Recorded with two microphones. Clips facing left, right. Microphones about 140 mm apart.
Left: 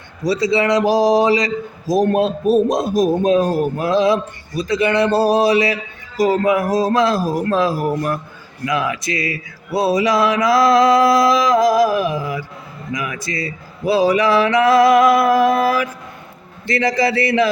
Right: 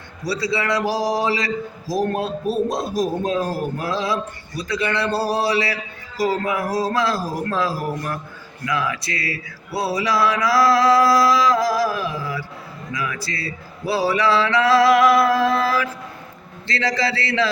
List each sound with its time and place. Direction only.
0.3 s a man's voice: 20° left (ahead or behind)